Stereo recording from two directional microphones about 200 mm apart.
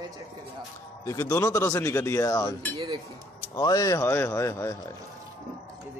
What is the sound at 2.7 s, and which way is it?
Speech, 25° right (ahead or behind).